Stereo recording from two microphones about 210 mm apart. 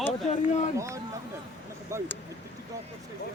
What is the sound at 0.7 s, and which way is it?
Speech, 15° right (ahead or behind).